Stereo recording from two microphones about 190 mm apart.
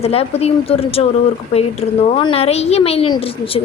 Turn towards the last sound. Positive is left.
turn(degrees=30)  # may be behind; listen again after turning